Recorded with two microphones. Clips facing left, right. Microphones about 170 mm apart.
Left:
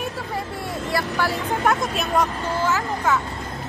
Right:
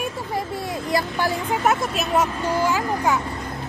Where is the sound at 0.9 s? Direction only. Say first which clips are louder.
Right 1 dB; 15° right (ahead or behind).